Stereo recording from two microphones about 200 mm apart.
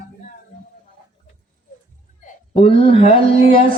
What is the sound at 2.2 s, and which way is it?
Speech, 30° left (ahead or behind).